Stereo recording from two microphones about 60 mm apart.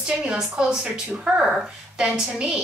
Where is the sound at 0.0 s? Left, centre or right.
Centre.